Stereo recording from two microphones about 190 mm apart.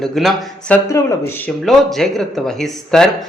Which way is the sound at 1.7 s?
Centre (ahead or behind).